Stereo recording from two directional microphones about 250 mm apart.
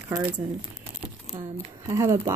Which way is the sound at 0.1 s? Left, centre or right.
Centre.